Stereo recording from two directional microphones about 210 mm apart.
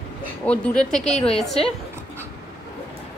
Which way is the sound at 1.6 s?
30° left (ahead or behind).